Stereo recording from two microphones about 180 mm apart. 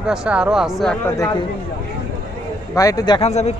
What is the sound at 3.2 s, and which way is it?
Speech, 40° left (ahead or behind).